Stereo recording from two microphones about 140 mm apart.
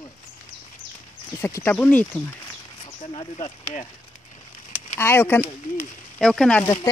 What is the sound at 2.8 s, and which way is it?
Speech, 45° left (ahead or behind).